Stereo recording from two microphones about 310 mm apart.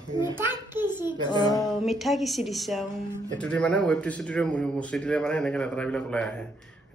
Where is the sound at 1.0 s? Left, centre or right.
Centre.